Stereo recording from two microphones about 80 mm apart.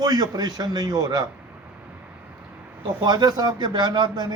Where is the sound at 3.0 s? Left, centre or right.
Right.